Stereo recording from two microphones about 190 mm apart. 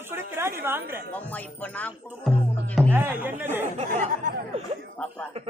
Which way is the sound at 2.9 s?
10° right (ahead or behind).